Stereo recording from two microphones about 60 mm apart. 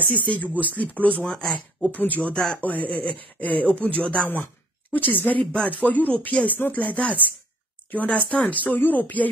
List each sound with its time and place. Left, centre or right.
0.1 s speech: left
1.2 s speech: centre
1.8 s speech: left
2.3 s speech: centre
2.6 s speech: left